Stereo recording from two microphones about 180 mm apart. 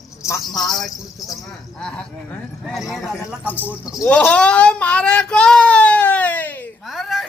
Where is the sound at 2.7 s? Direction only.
Centre (ahead or behind).